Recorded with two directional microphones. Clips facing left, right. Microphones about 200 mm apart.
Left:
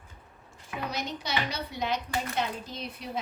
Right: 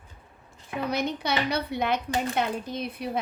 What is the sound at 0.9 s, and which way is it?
A woman's voice, 60° right (ahead or behind).